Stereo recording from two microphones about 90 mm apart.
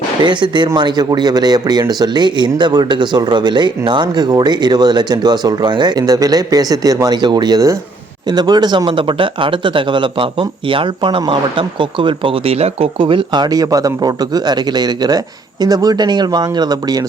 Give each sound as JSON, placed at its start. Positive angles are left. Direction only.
{"t": 0.2, "sound": "speech", "side_deg": -55}